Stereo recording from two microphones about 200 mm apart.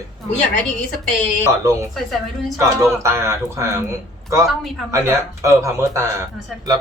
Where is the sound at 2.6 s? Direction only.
15° right (ahead or behind).